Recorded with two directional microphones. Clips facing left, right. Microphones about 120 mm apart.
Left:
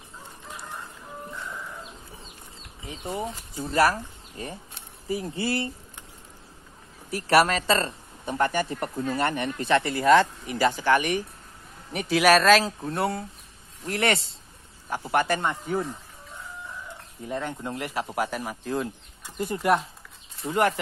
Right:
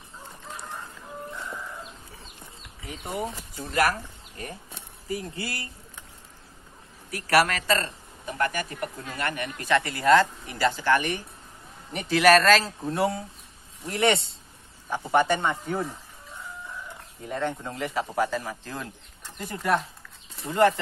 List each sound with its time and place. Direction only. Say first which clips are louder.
2.8 s speech: even; 25° left (ahead or behind)
5.0 s speech: left 4 dB; 25° left (ahead or behind)
7.1 s speech: left 2 dB; 25° left (ahead or behind); by 15.8 s centre (ahead or behind)
17.3 s speech: right 1 dB; 10° left (ahead or behind)